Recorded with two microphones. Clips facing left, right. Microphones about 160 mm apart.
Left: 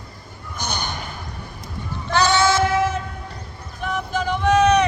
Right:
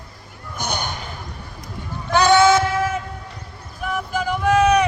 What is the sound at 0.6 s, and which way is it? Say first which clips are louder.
Basketball bounce: right 2 dB; 55° right (ahead or behind).